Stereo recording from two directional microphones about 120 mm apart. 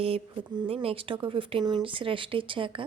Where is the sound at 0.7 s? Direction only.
50° right (ahead or behind).